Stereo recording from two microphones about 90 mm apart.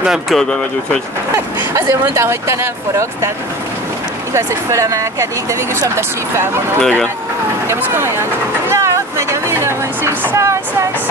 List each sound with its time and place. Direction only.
0.0 s speech: 5° right (ahead or behind)
1.3 s speech: 35° right (ahead or behind)
4.3 s speech: 35° right (ahead or behind)
6.8 s speech: 5° left (ahead or behind)
7.6 s speech: 30° right (ahead or behind)